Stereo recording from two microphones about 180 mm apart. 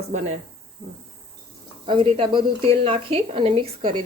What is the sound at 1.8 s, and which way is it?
Speech, 30° right (ahead or behind).